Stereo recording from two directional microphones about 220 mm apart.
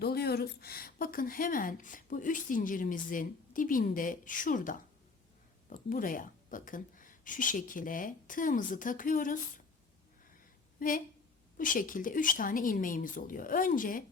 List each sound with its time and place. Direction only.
0.0 s speech: 45° left (ahead or behind)
10.8 s speech: 40° left (ahead or behind)